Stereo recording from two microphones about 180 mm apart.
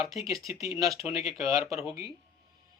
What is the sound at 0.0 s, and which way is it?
Speech, centre (ahead or behind).